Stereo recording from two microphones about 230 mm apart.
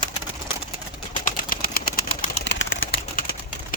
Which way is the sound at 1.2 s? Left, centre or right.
Left.